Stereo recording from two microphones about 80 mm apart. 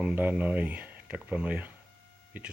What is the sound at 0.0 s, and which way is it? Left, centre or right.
Speech, centre.